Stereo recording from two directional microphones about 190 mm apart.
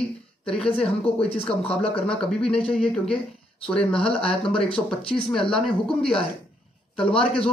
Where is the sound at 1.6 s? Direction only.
30° left (ahead or behind).